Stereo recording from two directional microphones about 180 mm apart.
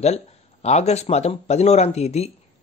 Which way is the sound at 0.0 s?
35° left (ahead or behind).